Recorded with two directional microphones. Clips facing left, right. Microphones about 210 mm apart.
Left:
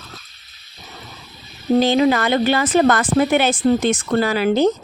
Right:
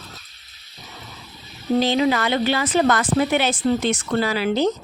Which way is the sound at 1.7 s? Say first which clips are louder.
Left 4 dB; 50° left (ahead or behind).